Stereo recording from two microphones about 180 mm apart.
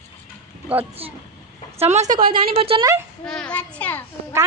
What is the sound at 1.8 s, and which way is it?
A man's voice, 40° right (ahead or behind).